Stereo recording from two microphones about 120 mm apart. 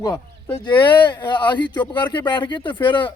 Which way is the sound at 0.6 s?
40° left (ahead or behind).